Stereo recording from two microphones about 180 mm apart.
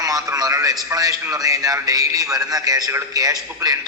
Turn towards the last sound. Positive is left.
turn(degrees=-20)  # may be behind; listen again after turning